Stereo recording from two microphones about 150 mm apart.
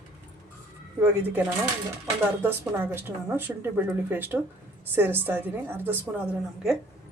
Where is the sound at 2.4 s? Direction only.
15° right (ahead or behind).